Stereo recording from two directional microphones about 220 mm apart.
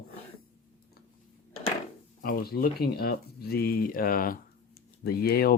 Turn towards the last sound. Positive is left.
turn(degrees=45)  # may be behind; listen again after turning